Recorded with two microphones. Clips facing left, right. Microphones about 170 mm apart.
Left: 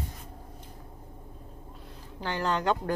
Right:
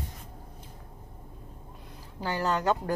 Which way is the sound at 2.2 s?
10° right (ahead or behind).